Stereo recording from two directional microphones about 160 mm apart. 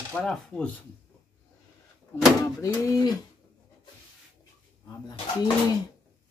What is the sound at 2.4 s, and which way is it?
Speech, 20° left (ahead or behind).